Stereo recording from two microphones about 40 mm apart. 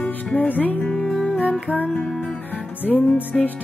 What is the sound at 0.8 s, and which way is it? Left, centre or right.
Music, left.